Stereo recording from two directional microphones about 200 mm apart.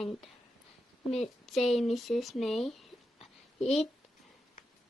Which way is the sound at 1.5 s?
Centre (ahead or behind).